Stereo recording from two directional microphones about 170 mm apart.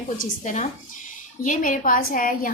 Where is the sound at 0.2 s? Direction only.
45° left (ahead or behind).